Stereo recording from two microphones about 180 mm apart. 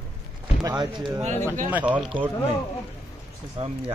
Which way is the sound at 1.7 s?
10° right (ahead or behind).